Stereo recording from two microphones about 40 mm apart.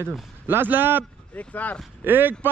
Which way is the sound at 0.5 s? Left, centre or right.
Right.